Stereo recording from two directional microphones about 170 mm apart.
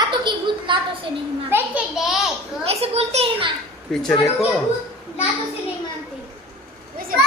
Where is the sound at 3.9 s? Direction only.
5° left (ahead or behind).